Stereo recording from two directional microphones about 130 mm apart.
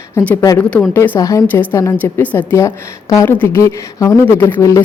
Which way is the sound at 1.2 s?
25° left (ahead or behind).